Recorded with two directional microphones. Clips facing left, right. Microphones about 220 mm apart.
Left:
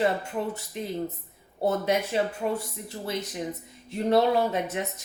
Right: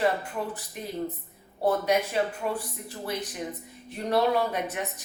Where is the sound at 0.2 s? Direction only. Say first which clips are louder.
Left 3 dB; 25° left (ahead or behind).